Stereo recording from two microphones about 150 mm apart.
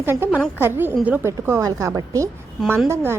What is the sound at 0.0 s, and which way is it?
A woman's voice, 15° right (ahead or behind).